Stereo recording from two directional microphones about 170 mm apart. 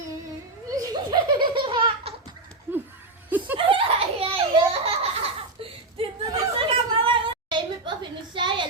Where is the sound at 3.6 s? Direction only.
30° right (ahead or behind).